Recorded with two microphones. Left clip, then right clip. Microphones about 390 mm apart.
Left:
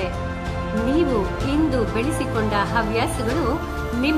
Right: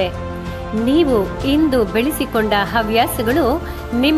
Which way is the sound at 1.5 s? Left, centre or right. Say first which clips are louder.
Right 7 dB; centre.